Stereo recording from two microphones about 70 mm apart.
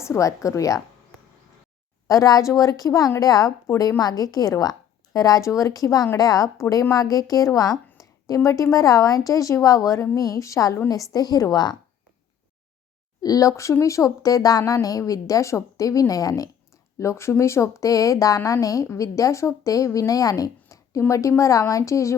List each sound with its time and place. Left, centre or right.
0.0 s a woman's voice: left
2.0 s a woman's voice: left
7.9 s a sound: left
8.7 s a woman's voice: left
11.1 s a woman's voice: left
13.2 s a woman's voice: left
17.0 s a woman's voice: left